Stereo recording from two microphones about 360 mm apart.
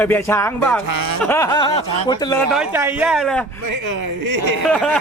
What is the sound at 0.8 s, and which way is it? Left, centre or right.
Speech, right.